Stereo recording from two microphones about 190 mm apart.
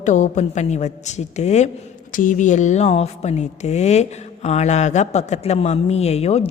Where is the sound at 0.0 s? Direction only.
40° left (ahead or behind).